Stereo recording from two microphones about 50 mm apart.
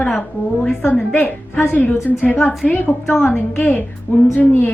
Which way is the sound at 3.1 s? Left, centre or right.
Centre.